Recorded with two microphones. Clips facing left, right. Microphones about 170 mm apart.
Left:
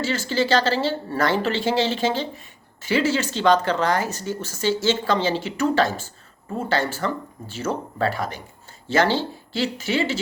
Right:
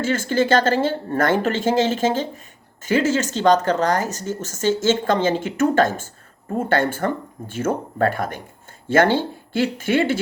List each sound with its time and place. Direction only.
0.0 s speech: 50° right (ahead or behind)